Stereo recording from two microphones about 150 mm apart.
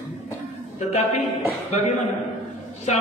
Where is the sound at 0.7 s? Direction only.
50° left (ahead or behind).